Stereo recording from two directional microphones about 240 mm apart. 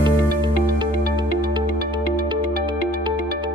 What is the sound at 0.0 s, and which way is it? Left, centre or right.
Music, centre.